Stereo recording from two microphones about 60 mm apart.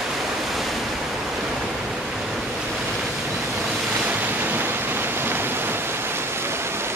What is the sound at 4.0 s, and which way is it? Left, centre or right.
Waves, right.